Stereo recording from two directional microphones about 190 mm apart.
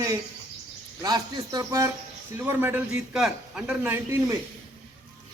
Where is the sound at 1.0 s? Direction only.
20° right (ahead or behind).